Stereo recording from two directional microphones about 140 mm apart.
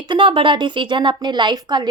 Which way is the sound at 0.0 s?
35° right (ahead or behind).